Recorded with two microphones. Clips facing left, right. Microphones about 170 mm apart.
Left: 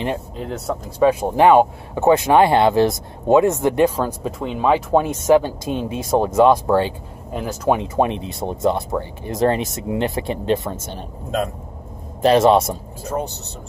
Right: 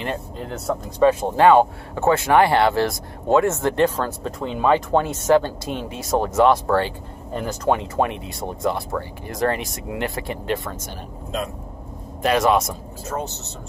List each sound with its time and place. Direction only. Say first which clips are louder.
0.5 s speech: even; centre (ahead or behind)
1.0 s speech: left 1 dB; 15° left (ahead or behind)
7.8 s speech: left 3 dB; 20° left (ahead or behind)
12.2 s speech: left 5 dB; 30° left (ahead or behind)
13.1 s speech: left 3 dB; 15° left (ahead or behind)